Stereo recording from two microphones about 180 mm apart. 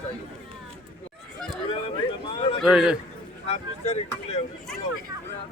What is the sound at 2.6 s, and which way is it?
Speech, 5° right (ahead or behind).